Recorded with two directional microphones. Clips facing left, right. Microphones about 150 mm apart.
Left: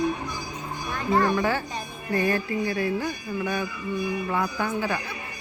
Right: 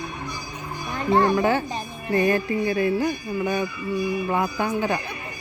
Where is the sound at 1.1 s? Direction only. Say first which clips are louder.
Right 4 dB; 25° right (ahead or behind).